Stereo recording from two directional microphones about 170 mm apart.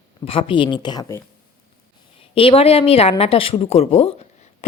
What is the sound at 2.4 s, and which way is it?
Speech, 35° left (ahead or behind).